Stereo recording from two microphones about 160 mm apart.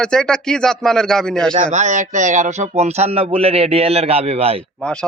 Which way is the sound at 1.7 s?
50° right (ahead or behind).